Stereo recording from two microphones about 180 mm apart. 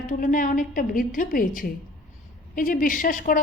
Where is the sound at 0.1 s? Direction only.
45° left (ahead or behind).